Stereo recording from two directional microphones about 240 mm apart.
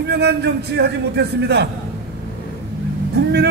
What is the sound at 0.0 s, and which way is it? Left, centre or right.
A man's voice, right.